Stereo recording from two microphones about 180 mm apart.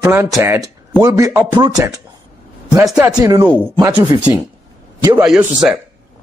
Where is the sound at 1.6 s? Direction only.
20° right (ahead or behind).